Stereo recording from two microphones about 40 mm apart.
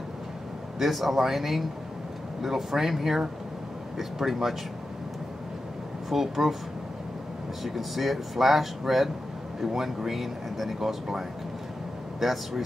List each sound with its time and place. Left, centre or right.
0.7 s speech: centre
6.0 s speech: centre
7.6 s speech: centre